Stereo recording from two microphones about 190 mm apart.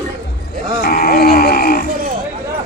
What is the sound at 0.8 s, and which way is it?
Speech, 50° left (ahead or behind).